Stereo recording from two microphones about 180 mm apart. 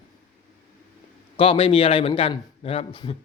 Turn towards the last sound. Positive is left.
turn(degrees=30)  # may be behind; listen again after turning